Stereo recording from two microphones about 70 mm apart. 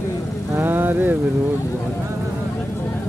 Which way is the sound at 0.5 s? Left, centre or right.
Right.